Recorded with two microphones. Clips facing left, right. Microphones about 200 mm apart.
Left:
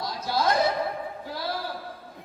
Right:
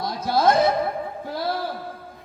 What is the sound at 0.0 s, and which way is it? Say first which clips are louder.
Chuckle: right 6 dB; 55° right (ahead or behind).